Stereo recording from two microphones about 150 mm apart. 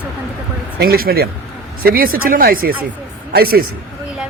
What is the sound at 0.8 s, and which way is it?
Speech, 85° right.